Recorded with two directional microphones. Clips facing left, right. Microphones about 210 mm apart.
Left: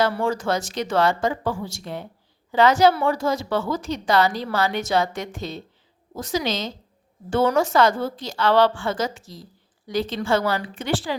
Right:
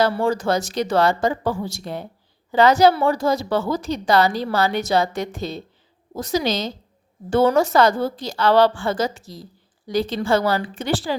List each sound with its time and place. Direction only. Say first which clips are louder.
0.0 s a woman's voice: right 3 dB; 35° right (ahead or behind)